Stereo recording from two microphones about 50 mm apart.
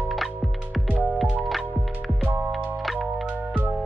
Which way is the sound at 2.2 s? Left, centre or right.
Right.